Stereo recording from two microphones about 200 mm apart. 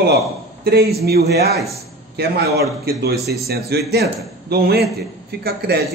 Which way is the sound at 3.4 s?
50° right (ahead or behind).